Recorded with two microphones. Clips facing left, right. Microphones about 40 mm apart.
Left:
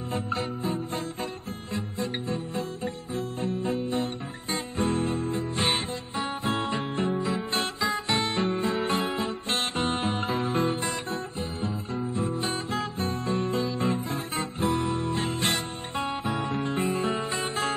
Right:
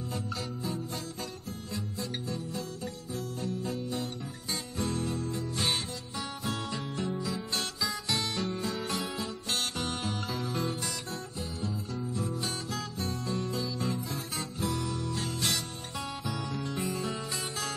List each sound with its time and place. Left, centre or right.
0.1 s music: left